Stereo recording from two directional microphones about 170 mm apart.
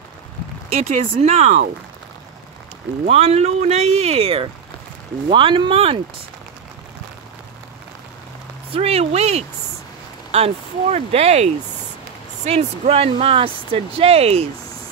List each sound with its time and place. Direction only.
0.7 s speech: 35° right (ahead or behind)
3.1 s speech: 35° right (ahead or behind)
8.7 s speech: 35° right (ahead or behind)